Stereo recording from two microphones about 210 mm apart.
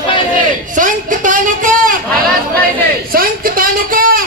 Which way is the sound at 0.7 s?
40° right (ahead or behind).